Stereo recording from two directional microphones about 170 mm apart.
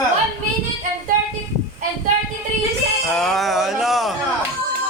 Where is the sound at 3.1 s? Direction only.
Centre (ahead or behind).